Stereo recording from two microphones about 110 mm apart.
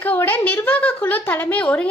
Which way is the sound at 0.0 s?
15° left (ahead or behind).